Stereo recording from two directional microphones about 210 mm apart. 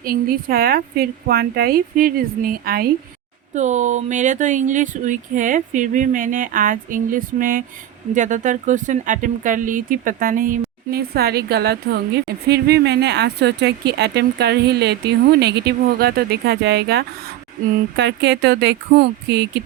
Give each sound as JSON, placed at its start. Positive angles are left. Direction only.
{"t": 0.0, "sound": "speech", "side_deg": -45}
{"t": 3.5, "sound": "speech", "side_deg": -35}